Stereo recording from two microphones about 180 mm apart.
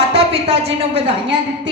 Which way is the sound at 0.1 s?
30° right (ahead or behind).